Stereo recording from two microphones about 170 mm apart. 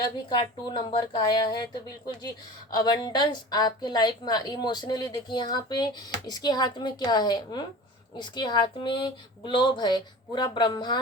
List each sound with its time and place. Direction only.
0.0 s a woman's voice: 25° left (ahead or behind)